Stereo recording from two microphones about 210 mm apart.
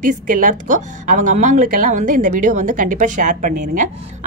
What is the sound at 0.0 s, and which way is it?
A woman's voice, 40° right (ahead or behind).